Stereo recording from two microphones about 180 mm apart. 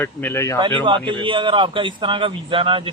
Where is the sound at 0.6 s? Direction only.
25° right (ahead or behind).